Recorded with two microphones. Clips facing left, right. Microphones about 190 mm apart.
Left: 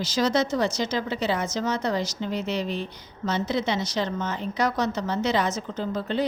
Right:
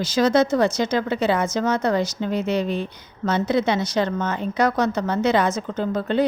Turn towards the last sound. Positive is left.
turn(degrees=-55)  # may be behind; listen again after turning